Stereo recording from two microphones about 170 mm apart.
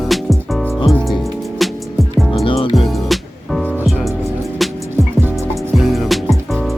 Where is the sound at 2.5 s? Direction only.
30° left (ahead or behind).